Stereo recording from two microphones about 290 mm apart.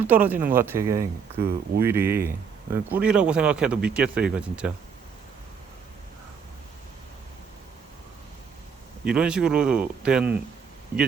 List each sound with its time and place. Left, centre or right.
0.0 s speech: centre
1.4 s speech: right
1.8 s speech: centre
9.0 s speech: centre